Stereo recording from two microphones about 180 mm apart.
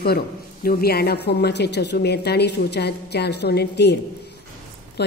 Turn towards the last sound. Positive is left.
turn(degrees=65)  # may be behind; listen again after turning